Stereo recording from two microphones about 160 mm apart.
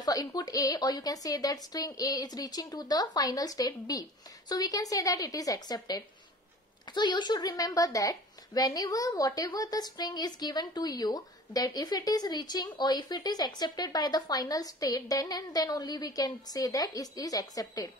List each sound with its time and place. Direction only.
0.0 s a woman's voice: 25° left (ahead or behind)